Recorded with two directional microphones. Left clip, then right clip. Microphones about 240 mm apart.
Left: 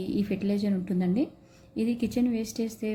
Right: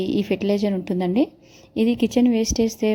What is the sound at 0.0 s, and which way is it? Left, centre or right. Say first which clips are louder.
A woman's voice: right 8 dB; right.